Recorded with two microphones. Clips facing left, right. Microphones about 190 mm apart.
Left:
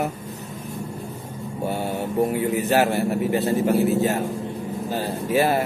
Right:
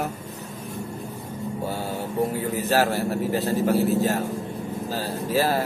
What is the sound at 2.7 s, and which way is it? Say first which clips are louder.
A man's voice: left 1 dB; 15° left (ahead or behind).